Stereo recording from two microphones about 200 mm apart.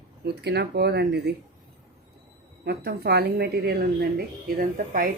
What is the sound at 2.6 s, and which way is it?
Speech, 55° right (ahead or behind).